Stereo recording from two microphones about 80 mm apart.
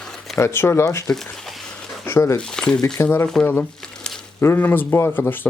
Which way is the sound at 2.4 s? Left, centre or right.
Centre.